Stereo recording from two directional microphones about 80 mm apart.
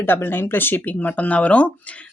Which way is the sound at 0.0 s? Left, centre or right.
Left.